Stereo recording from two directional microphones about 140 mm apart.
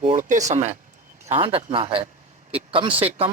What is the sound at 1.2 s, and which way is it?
Speech, 40° right (ahead or behind).